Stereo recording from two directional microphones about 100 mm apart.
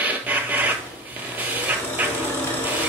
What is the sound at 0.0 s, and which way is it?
Printer, 15° right (ahead or behind).